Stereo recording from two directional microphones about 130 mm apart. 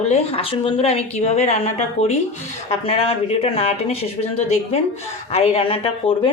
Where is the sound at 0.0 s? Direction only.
55° left (ahead or behind).